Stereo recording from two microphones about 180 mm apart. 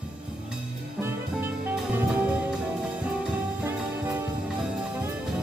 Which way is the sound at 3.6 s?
10° right (ahead or behind).